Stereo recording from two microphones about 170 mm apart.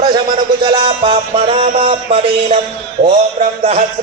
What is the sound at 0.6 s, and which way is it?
Music, 30° right (ahead or behind).